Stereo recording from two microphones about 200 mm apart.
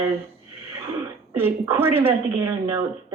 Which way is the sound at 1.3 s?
10° right (ahead or behind).